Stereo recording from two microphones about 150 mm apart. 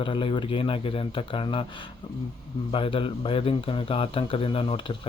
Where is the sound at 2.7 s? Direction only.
35° left (ahead or behind).